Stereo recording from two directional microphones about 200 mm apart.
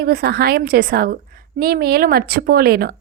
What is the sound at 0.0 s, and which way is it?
A woman's voice, 50° right (ahead or behind).